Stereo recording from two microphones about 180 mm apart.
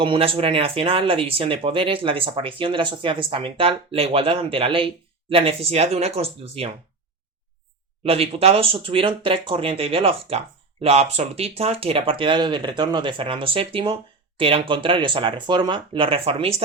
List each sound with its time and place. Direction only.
0.0 s speech: 30° right (ahead or behind)
8.0 s speech: 35° right (ahead or behind)